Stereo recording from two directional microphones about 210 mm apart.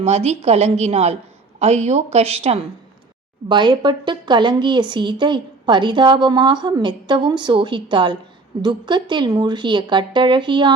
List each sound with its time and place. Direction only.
0.0 s a woman's voice: 30° right (ahead or behind)